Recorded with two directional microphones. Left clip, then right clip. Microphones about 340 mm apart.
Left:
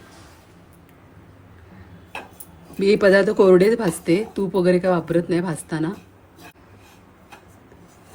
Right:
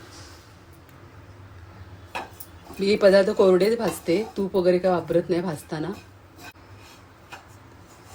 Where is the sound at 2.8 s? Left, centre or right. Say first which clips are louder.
Left 2 dB; left.